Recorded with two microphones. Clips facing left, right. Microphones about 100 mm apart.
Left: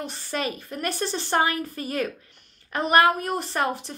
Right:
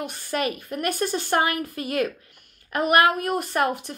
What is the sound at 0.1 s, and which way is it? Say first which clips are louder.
A woman's voice: right 3 dB; 55° right (ahead or behind).